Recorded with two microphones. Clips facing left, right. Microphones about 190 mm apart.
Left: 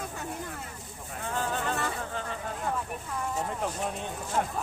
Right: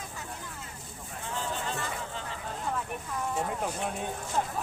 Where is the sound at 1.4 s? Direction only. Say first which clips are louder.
Left 4 dB; 55° left (ahead or behind).